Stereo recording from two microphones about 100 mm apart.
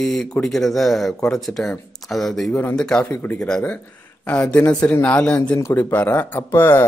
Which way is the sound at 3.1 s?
20° left (ahead or behind).